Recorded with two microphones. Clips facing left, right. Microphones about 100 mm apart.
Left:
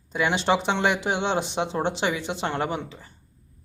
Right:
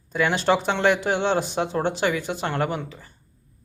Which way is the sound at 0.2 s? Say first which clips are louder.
Right 2 dB; 20° left (ahead or behind).